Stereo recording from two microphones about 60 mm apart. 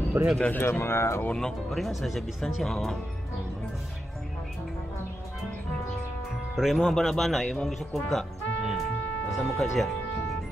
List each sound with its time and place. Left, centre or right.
0.2 s speech: right
0.5 s speech: left
1.7 s a man's voice: centre
6.5 s a man's voice: centre